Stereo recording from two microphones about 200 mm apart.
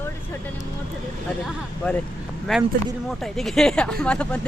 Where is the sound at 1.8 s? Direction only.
5° left (ahead or behind).